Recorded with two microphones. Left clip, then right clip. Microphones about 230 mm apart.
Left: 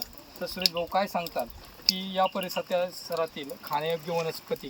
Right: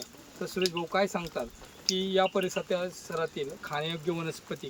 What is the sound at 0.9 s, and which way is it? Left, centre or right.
Speech, centre.